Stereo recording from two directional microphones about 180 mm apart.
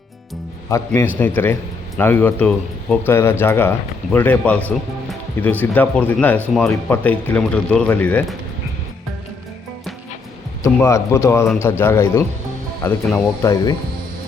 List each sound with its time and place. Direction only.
0.7 s speech: 15° left (ahead or behind)
10.6 s speech: 15° left (ahead or behind)